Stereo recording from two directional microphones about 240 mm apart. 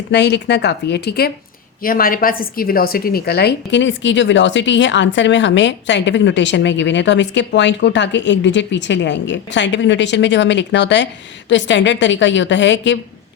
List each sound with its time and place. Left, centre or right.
0.1 s a woman's voice: left